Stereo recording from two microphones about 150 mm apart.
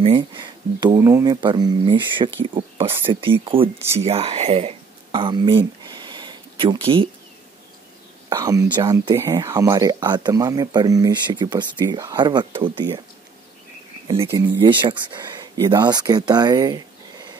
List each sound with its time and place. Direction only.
0.0 s speech: 35° right (ahead or behind)
8.3 s speech: 25° right (ahead or behind)
14.4 s speech: 30° right (ahead or behind)